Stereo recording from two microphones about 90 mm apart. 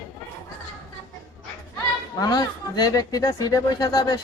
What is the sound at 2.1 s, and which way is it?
Speech, 50° left (ahead or behind).